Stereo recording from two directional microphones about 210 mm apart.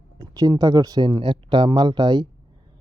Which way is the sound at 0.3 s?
20° right (ahead or behind).